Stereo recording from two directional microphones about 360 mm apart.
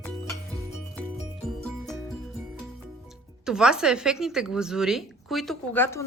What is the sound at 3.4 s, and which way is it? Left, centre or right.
A woman's voice, centre.